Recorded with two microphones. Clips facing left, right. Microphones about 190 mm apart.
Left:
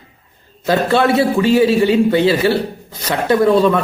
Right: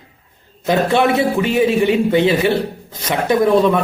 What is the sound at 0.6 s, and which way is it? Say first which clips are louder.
A man's voice: even; 15° right (ahead or behind).